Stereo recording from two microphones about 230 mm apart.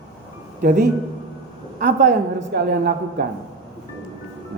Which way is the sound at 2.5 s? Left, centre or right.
Right.